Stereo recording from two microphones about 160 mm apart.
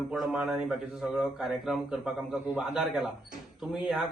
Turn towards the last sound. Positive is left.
turn(degrees=0)  # may be behind; listen again after turning